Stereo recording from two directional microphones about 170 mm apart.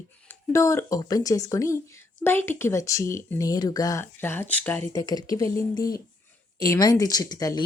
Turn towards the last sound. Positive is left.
turn(degrees=20)  # may be behind; listen again after turning